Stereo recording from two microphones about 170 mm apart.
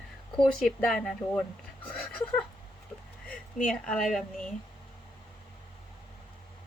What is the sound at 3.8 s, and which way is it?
Speech, 5° left (ahead or behind).